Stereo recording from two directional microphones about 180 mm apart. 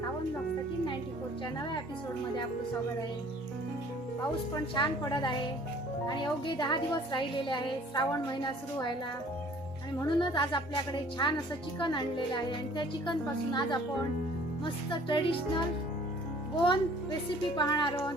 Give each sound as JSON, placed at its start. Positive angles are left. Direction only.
{"t": 4.7, "sound": "a woman's voice", "side_deg": 25}
{"t": 10.2, "sound": "a woman's voice", "side_deg": 25}
{"t": 16.6, "sound": "a woman's voice", "side_deg": 25}